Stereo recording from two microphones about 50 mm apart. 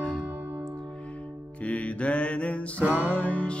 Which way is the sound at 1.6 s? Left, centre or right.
Left.